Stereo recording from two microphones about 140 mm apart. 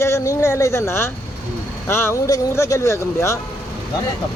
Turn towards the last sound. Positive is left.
turn(degrees=20)  # may be behind; listen again after turning